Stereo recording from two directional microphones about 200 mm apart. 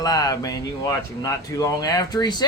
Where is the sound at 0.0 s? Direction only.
20° left (ahead or behind).